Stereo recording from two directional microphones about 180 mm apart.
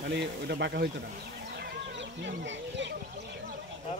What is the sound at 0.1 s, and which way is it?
Speech, 75° right (ahead or behind).